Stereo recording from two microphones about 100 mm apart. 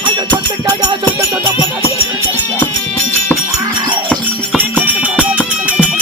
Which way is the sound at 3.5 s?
45° right (ahead or behind).